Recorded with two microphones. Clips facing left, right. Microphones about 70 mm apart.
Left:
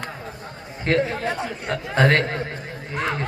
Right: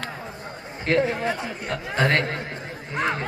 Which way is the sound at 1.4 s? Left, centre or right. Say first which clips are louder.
Left 3 dB; left.